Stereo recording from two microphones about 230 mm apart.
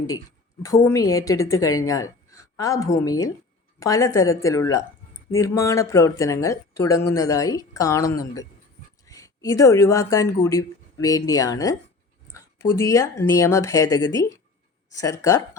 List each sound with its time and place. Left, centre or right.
0.6 s a woman's voice: centre